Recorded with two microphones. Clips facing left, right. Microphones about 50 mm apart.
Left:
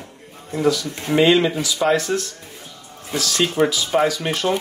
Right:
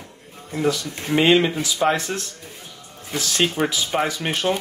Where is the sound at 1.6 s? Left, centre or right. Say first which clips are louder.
Left 2 dB; right.